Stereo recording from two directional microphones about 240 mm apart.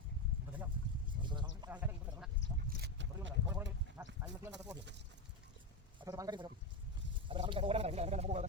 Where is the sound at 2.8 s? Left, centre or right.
Right.